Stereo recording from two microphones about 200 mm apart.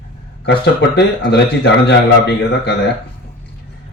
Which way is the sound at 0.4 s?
60° left (ahead or behind).